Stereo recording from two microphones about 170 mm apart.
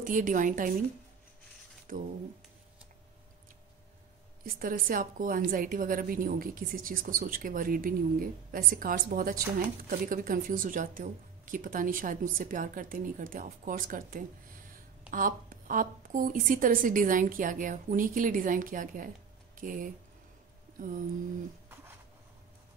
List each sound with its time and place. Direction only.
0.0 s speech: 50° right (ahead or behind)
1.9 s speech: 55° right (ahead or behind)
4.6 s a woman's voice: 55° right (ahead or behind)